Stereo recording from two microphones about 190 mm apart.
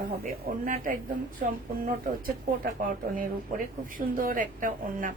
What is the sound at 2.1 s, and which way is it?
A woman's voice, 50° right (ahead or behind).